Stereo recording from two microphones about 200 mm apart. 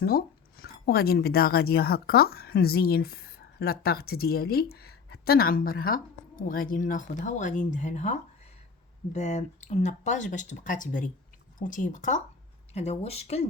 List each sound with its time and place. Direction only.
0.0 s speech: 50° left (ahead or behind); by 13.5 s 30° left (ahead or behind)